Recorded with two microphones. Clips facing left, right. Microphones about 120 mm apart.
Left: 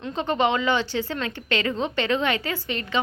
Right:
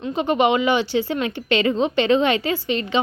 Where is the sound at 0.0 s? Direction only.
15° right (ahead or behind).